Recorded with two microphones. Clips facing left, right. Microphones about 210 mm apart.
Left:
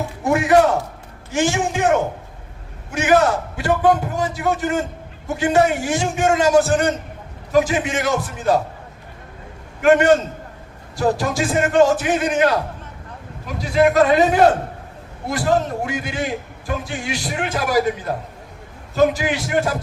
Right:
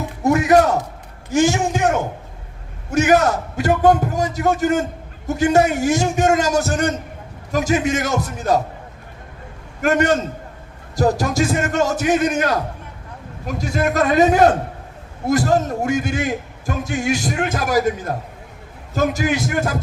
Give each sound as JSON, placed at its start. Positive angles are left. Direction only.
{"t": 0.3, "sound": "a man's voice", "side_deg": -40}
{"t": 2.9, "sound": "a man's voice", "side_deg": -40}
{"t": 9.8, "sound": "a man's voice", "side_deg": -40}
{"t": 15.3, "sound": "a man's voice", "side_deg": -45}